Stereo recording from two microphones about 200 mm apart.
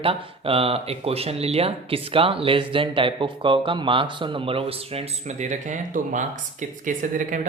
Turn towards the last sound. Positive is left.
turn(degrees=-40)  # may be behind; listen again after turning